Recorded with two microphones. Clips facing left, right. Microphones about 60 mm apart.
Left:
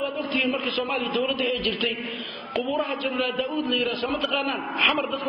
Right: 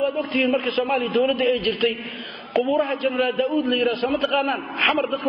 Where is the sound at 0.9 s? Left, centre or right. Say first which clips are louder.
Right 7 dB; centre.